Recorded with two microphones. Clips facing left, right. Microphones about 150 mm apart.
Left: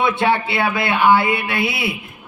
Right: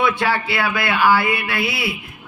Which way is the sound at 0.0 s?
25° left (ahead or behind).